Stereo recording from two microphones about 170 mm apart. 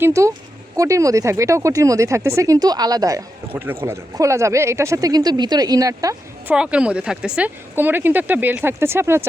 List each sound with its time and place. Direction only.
0.0 s speech: 15° right (ahead or behind)
6.5 s speech: 5° right (ahead or behind)